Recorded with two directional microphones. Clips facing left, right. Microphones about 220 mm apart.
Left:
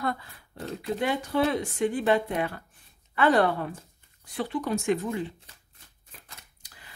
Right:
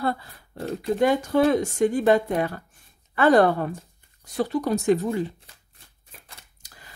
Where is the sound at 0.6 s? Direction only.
45° right (ahead or behind).